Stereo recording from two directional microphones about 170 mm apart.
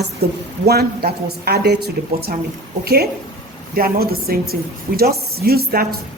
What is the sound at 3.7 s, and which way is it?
A woman's voice, 60° right (ahead or behind).